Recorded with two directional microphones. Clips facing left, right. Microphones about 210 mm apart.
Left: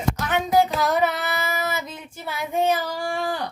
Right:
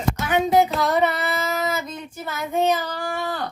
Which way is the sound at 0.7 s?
Centre (ahead or behind).